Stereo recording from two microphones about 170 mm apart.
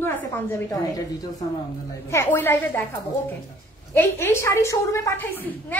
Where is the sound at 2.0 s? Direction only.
15° left (ahead or behind).